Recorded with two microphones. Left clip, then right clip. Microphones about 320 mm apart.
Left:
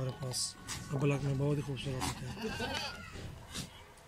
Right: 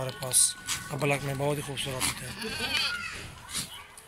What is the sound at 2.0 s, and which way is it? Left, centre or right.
Speech, left.